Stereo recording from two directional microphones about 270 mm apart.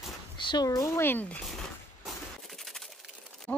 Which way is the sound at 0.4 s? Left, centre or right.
Centre.